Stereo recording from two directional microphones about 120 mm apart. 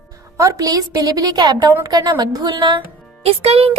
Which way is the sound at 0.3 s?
25° right (ahead or behind).